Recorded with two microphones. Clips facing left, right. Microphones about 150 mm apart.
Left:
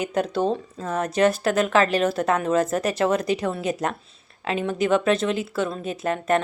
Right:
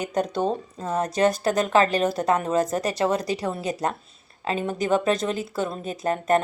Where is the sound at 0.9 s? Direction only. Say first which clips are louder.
Left 1 dB; 30° right (ahead or behind).